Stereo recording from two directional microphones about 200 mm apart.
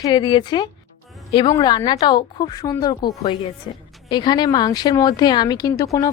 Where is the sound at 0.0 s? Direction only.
20° left (ahead or behind).